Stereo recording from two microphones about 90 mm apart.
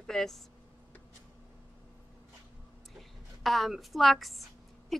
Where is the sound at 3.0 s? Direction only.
Centre (ahead or behind).